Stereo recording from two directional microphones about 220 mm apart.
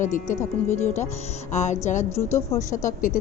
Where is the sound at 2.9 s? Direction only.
35° left (ahead or behind).